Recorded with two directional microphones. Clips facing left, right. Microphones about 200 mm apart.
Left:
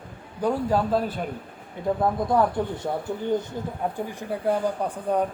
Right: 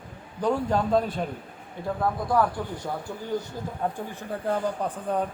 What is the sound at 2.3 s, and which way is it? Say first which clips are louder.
Speech: left 1 dB; 20° left (ahead or behind).